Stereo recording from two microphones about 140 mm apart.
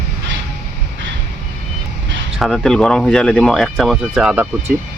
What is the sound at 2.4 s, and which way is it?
Speech, centre (ahead or behind).